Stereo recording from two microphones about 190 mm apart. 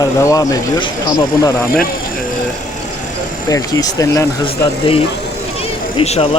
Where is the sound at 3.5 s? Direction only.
20° left (ahead or behind).